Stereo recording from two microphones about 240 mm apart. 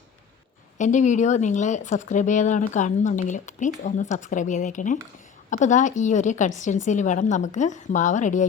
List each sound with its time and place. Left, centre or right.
0.8 s speech: left